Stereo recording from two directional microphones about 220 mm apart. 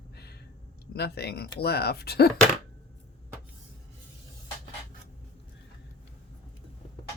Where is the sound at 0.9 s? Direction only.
45° left (ahead or behind).